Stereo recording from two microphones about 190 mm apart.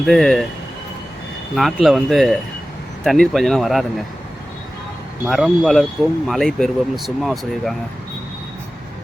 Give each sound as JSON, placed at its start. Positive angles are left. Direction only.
{"t": 0.0, "sound": "speech", "side_deg": 0}
{"t": 1.5, "sound": "speech", "side_deg": 0}
{"t": 5.3, "sound": "speech", "side_deg": 0}